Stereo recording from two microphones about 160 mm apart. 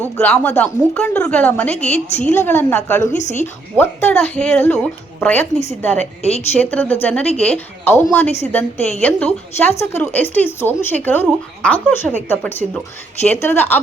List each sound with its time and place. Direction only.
0.2 s speech: 10° left (ahead or behind)
3.1 s a woman's voice: 45° left (ahead or behind)
3.8 s speech: 15° left (ahead or behind)